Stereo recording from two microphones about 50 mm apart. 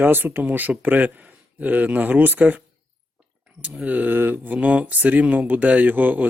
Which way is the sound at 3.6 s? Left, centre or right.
Right.